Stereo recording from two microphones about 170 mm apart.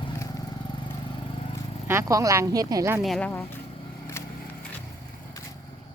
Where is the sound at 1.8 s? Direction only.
15° right (ahead or behind).